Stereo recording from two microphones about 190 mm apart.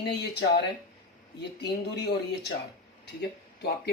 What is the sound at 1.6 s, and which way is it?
Speech, 60° left (ahead or behind).